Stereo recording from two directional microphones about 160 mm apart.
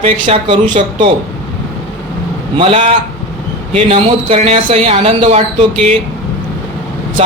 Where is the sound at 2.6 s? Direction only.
35° right (ahead or behind).